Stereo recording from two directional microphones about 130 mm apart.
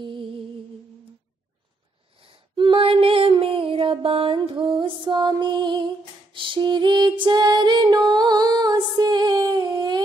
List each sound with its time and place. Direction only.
0.0 s music: 40° right (ahead or behind)
2.2 s a sound: 40° right (ahead or behind)
6.3 s female singing: 40° right (ahead or behind)